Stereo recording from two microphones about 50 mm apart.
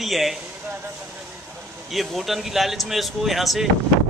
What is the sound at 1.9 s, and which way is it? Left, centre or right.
Speech, centre.